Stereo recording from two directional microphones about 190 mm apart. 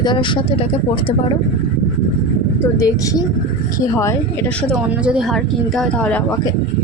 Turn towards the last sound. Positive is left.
turn(degrees=5)  # may be behind; listen again after turning